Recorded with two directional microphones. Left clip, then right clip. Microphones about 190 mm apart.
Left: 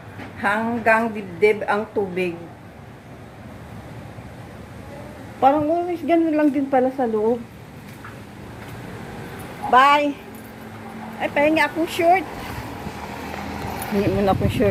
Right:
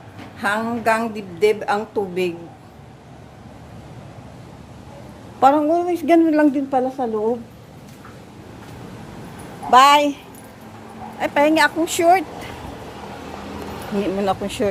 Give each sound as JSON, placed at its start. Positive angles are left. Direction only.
{"t": 0.3, "sound": "a woman's voice", "side_deg": -10}
{"t": 5.4, "sound": "a woman's voice", "side_deg": -25}
{"t": 6.7, "sound": "speech", "side_deg": 0}
{"t": 9.6, "sound": "a woman's voice", "side_deg": -20}
{"t": 11.2, "sound": "a woman's voice", "side_deg": -25}
{"t": 14.0, "sound": "speech", "side_deg": 0}